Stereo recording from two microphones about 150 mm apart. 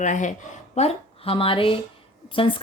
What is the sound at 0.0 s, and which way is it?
Speech, 55° left (ahead or behind).